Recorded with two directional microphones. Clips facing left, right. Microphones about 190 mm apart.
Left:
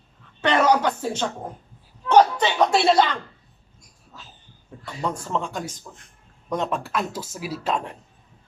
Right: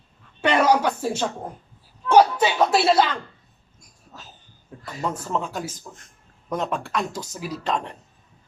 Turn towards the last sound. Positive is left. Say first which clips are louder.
# even
turn(degrees=5)  # may be behind; listen again after turning